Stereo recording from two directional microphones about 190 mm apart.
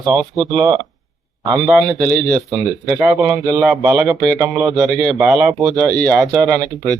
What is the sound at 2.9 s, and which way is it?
Speech, 5° right (ahead or behind).